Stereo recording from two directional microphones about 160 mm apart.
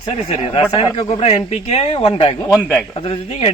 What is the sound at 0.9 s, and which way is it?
Speech, 40° left (ahead or behind).